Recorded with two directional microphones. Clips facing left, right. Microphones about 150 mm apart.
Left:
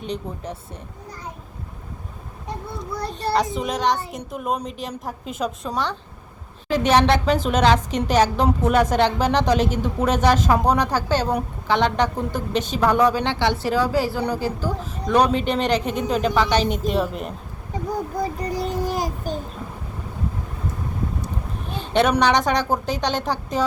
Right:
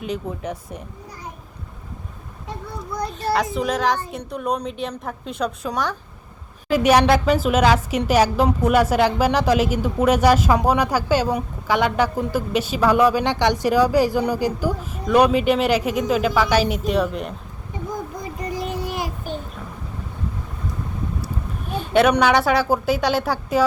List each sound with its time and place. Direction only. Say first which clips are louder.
3.1 s a woman's voice: left 1 dB; centre (ahead or behind)
6.7 s a woman's voice: right 2 dB; 10° right (ahead or behind)
18.2 s child singing: left 3 dB; 35° left (ahead or behind)
21.8 s a sound: right 3 dB; 5° right (ahead or behind)
22.2 s a woman's voice: right 2 dB; 5° right (ahead or behind)